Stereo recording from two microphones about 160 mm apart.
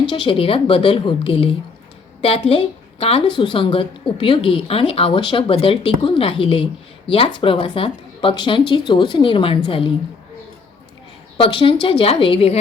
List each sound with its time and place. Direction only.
0.1 s a woman's voice: 35° left (ahead or behind)
11.3 s a woman's voice: 35° left (ahead or behind)